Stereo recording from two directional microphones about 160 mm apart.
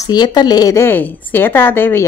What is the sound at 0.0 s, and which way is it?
A woman's voice, 25° left (ahead or behind).